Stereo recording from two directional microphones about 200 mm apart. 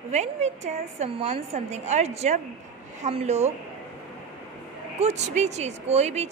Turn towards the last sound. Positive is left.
turn(degrees=-35)  # may be behind; listen again after turning